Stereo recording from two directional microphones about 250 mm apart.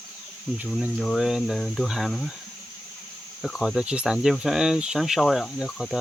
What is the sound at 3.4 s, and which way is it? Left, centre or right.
Speech, centre.